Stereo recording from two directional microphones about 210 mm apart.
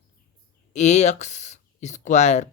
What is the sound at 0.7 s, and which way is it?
Speech, 35° left (ahead or behind).